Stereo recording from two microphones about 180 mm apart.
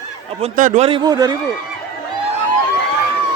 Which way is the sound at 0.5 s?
45° right (ahead or behind).